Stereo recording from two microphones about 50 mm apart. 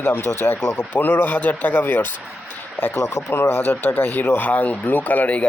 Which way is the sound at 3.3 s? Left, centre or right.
Left.